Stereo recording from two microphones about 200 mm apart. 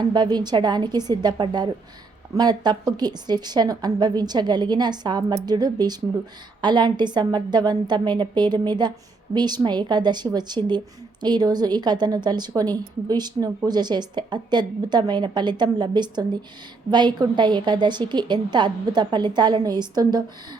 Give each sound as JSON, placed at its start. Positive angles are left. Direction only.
{"t": 0.0, "sound": "a woman's voice", "side_deg": -20}